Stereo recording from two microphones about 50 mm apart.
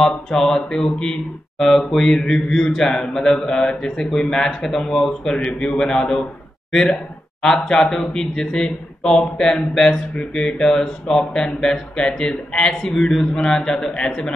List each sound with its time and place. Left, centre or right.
0.0 s a man's voice: centre
10.6 s a man's voice: centre